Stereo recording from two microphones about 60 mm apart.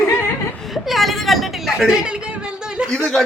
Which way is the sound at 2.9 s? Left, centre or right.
Centre.